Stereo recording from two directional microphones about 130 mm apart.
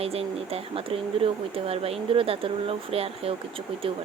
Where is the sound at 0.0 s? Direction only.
50° right (ahead or behind).